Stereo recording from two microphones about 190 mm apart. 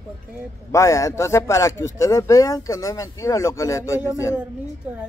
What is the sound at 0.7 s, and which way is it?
Speech, 15° left (ahead or behind).